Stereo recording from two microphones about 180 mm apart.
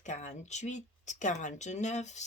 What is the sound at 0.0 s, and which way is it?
Speech, 40° left (ahead or behind).